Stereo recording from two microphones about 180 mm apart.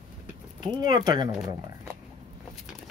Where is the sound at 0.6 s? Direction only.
25° right (ahead or behind).